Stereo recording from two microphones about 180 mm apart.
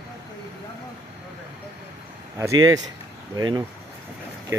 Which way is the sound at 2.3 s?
20° right (ahead or behind).